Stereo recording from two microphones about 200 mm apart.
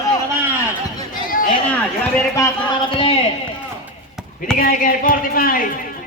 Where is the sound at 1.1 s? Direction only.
45° left (ahead or behind).